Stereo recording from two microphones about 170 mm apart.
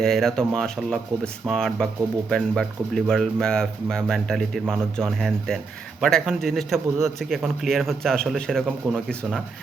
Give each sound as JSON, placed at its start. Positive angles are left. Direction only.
{"t": 0.0, "sound": "a man's voice", "side_deg": 0}